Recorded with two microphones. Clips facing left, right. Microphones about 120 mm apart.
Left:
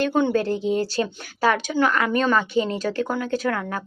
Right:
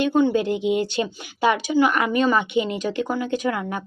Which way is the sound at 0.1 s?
5° right (ahead or behind).